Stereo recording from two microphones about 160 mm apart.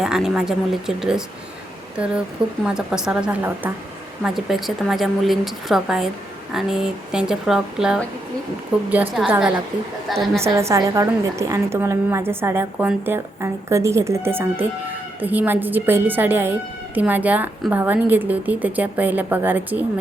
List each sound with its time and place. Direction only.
0.0 s a woman's voice: 5° right (ahead or behind)
2.6 s a woman's voice: 5° right (ahead or behind)
10.4 s a woman's voice: 15° right (ahead or behind)